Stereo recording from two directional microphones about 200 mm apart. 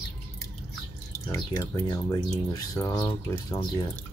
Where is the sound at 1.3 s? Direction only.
15° left (ahead or behind).